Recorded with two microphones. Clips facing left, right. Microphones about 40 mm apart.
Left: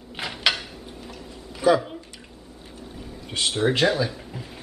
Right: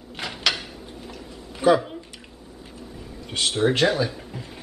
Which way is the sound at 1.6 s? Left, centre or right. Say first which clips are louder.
Right 1 dB; right.